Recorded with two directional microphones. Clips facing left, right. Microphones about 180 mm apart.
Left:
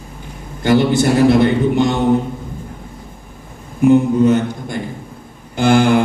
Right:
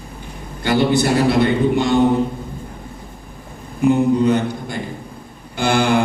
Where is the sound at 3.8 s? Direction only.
45° left (ahead or behind).